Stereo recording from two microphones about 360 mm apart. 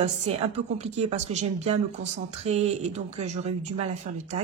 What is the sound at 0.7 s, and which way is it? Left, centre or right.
Speech, centre.